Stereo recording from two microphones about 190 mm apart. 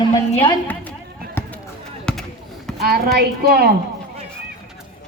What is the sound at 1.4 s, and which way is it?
Chop, 10° left (ahead or behind).